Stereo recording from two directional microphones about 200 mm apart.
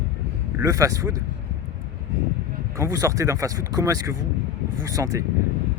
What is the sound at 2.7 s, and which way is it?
Speech, 15° right (ahead or behind).